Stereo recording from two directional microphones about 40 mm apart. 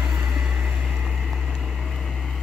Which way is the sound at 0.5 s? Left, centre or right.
Right.